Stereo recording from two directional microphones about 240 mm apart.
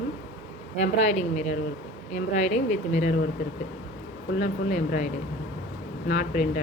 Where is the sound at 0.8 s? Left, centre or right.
Left.